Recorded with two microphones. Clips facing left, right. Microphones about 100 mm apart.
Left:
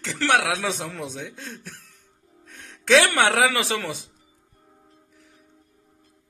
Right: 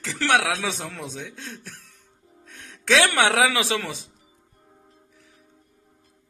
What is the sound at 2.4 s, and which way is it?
Speech, centre (ahead or behind).